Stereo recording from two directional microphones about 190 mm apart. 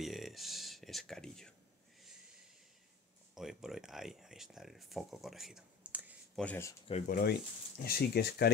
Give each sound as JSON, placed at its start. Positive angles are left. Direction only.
{"t": 0.0, "sound": "a sound", "side_deg": 0}
{"t": 3.3, "sound": "speech", "side_deg": 0}
{"t": 6.4, "sound": "speech", "side_deg": 10}
{"t": 7.1, "sound": "speech", "side_deg": 55}